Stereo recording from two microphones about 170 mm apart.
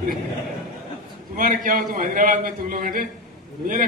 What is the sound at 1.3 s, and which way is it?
A man's voice, 50° right (ahead or behind).